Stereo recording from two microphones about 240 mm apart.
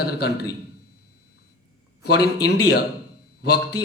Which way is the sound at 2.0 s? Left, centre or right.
Left.